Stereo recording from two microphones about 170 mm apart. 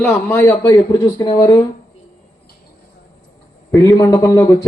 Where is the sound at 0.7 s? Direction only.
25° left (ahead or behind).